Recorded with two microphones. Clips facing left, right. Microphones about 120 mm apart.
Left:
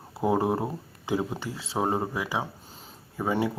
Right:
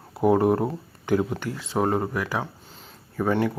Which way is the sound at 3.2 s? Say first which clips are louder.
Right 4 dB; 10° left (ahead or behind).